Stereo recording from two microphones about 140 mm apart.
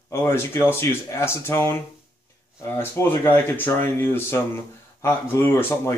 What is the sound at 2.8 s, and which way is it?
Speech, 15° left (ahead or behind).